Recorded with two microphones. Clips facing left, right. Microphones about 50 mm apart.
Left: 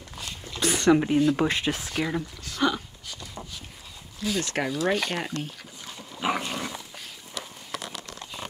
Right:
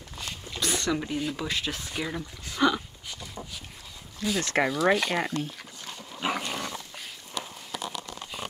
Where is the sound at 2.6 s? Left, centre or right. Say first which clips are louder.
Right 1 dB; centre.